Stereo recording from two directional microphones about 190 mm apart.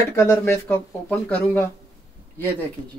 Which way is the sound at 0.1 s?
15° left (ahead or behind).